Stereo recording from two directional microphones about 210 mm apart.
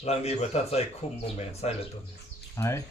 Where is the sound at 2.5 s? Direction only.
15° left (ahead or behind).